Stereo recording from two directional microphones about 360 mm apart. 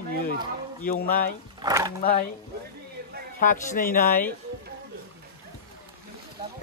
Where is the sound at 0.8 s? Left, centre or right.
Left.